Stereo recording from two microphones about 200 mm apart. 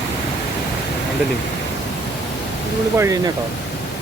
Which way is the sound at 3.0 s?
15° right (ahead or behind).